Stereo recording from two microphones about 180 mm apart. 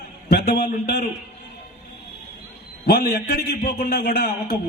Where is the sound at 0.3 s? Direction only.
60° left (ahead or behind).